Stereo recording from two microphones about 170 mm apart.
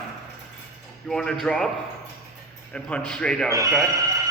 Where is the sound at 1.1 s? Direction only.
5° left (ahead or behind).